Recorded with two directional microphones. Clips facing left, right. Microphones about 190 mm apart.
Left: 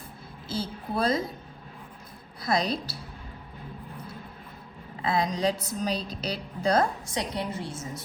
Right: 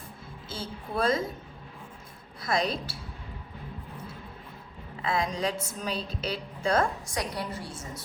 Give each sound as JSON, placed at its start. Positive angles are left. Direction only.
{"t": 0.4, "sound": "a sound", "side_deg": 35}
{"t": 2.4, "sound": "a woman's voice", "side_deg": 35}
{"t": 5.0, "sound": "a woman's voice", "side_deg": 35}
{"t": 7.1, "sound": "a woman's voice", "side_deg": 25}